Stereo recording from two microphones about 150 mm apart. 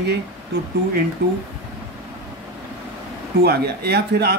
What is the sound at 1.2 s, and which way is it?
Speech, 90° right.